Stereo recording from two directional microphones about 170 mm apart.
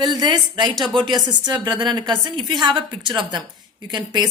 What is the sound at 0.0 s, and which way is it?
A woman's voice, 25° right (ahead or behind).